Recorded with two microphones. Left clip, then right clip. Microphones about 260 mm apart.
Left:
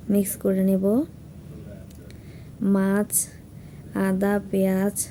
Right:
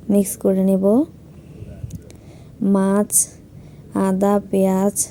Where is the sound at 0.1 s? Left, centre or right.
Centre.